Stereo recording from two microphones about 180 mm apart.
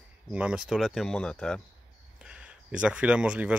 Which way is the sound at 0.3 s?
5° right (ahead or behind).